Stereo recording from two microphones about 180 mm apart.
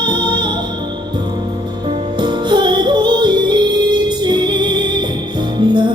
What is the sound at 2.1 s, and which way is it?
Music, 25° right (ahead or behind).